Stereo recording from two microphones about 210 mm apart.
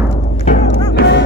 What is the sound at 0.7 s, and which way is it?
Music, 55° left (ahead or behind).